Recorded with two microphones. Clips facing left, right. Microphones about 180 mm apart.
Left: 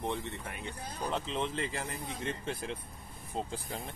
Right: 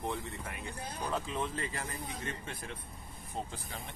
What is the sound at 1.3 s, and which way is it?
Speech, 25° left (ahead or behind).